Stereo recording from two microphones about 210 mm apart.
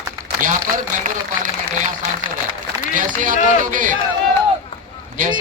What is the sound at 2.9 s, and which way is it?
A man's voice, 40° right (ahead or behind).